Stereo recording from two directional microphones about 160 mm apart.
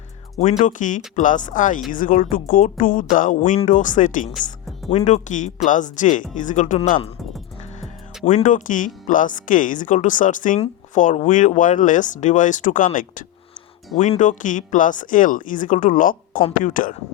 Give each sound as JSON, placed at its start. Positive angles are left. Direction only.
{"t": 0.6, "sound": "speech", "side_deg": 55}
{"t": 7.8, "sound": "speech", "side_deg": 50}